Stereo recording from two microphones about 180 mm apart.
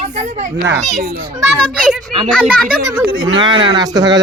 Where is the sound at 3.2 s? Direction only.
25° right (ahead or behind).